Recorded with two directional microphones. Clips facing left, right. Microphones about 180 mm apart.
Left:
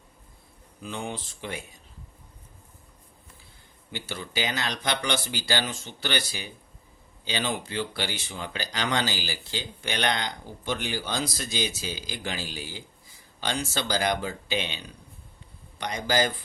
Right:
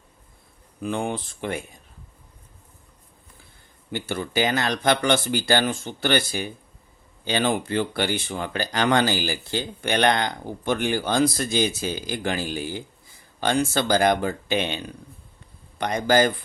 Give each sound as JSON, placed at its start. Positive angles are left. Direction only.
{"t": 0.8, "sound": "speech", "side_deg": -55}
{"t": 3.9, "sound": "speech", "side_deg": -50}